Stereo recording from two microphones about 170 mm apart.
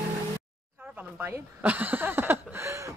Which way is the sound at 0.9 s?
10° right (ahead or behind).